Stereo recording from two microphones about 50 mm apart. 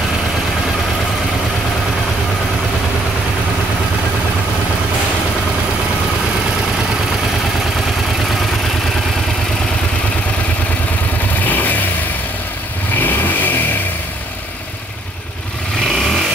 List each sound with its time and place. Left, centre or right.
11.4 s vehicle: left
13.0 s vehicle: left